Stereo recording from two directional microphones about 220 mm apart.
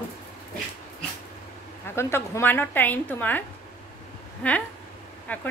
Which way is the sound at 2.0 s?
10° left (ahead or behind).